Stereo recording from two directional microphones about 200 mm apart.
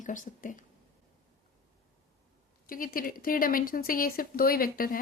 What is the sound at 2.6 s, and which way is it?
A woman's voice, 45° left (ahead or behind).